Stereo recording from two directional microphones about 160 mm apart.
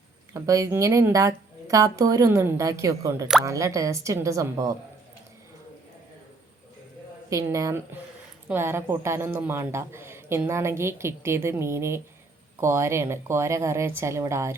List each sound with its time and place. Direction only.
0.3 s speech: 20° right (ahead or behind)
7.3 s speech: 20° right (ahead or behind)